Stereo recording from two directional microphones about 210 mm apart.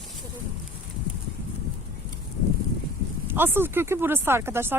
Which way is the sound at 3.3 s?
10° right (ahead or behind).